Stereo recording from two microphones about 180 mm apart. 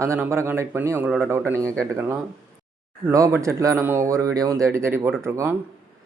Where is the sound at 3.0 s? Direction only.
15° right (ahead or behind).